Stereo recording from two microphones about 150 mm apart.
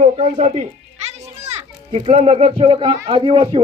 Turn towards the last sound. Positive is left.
turn(degrees=-40)  # may be behind; listen again after turning